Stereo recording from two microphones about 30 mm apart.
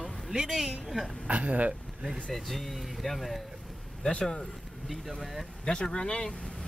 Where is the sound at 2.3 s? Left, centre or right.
Centre.